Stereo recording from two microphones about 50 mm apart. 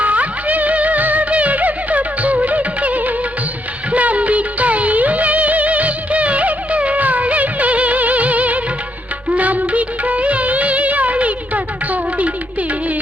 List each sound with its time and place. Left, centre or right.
0.0 s music: right
3.9 s music of bollywood: right